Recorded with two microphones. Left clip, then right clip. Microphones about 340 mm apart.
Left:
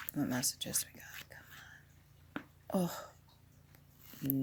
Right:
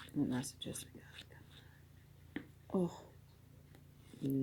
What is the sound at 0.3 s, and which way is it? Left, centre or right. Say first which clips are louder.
Speech: left 5 dB; left.